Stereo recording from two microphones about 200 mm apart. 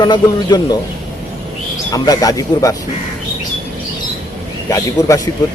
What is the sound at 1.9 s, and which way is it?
Speech, 20° left (ahead or behind).